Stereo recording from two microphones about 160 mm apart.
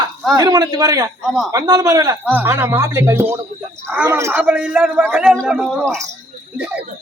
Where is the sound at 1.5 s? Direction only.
25° right (ahead or behind); by 5.7 s 5° right (ahead or behind).